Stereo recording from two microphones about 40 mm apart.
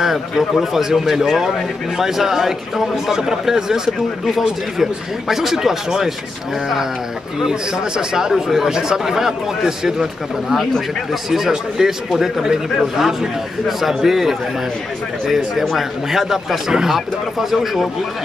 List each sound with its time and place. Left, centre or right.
0.0 s a man's voice: centre
5.3 s a man's voice: centre
8.1 s a man's voice: centre
11.2 s a man's voice: centre